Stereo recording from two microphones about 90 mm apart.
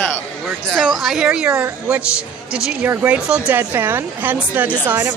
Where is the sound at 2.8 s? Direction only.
20° right (ahead or behind).